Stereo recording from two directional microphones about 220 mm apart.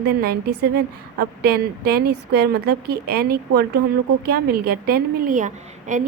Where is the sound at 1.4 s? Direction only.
45° right (ahead or behind).